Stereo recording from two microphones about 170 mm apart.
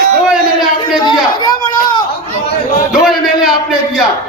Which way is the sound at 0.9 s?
25° left (ahead or behind).